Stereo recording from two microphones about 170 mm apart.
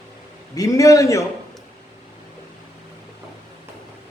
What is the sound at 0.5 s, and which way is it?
Speech, 20° left (ahead or behind).